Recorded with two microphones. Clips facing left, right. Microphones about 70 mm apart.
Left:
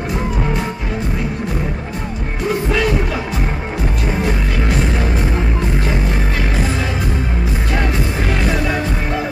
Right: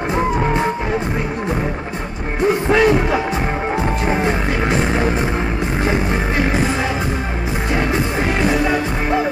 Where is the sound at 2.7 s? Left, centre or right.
Right.